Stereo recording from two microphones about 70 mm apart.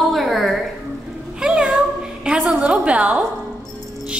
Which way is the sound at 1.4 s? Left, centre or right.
Centre.